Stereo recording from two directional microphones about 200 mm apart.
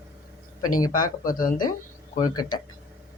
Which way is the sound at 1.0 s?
45° left (ahead or behind).